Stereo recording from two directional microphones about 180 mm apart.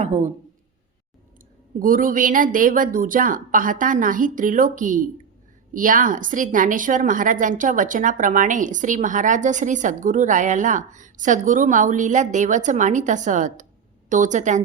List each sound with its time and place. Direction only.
0.0 s speech: 40° right (ahead or behind)
1.8 s a woman's voice: 50° right (ahead or behind)